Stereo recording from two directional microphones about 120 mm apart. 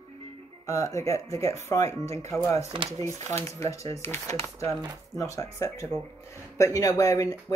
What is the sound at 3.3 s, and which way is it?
Speech, 25° left (ahead or behind).